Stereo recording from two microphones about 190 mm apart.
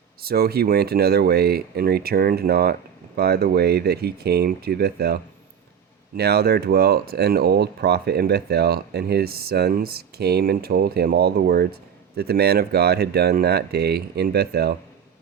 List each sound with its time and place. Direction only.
0.2 s speech: 55° right (ahead or behind)